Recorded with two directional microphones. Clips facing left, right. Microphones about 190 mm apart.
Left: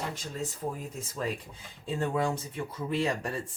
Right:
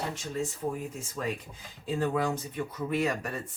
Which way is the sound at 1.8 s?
25° left (ahead or behind).